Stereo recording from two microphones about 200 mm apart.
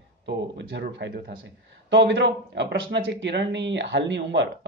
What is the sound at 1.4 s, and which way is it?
Speech, 65° right (ahead or behind).